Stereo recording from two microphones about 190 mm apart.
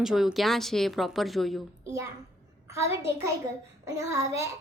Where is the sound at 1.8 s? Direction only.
15° right (ahead or behind).